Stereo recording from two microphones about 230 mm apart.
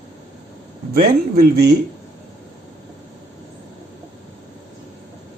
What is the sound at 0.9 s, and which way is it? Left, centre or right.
Speech, right.